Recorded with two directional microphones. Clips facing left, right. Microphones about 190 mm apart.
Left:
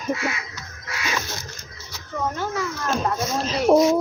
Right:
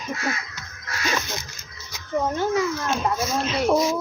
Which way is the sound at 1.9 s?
15° right (ahead or behind).